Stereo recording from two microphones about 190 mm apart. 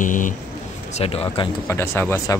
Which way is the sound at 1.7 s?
10° left (ahead or behind).